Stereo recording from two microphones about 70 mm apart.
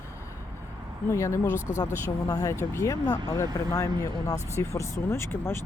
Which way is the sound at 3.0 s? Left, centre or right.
Left.